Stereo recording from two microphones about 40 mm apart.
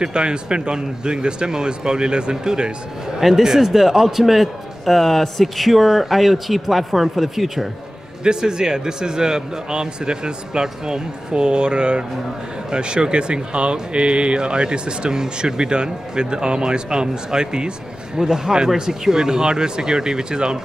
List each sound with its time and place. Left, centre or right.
0.0 s speech: right
3.2 s a man's voice: centre
8.2 s speech: centre